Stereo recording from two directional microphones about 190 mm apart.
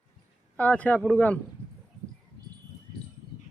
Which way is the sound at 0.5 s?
10° left (ahead or behind).